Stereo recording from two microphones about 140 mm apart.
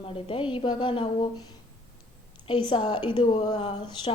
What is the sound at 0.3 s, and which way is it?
A woman's voice, 40° left (ahead or behind).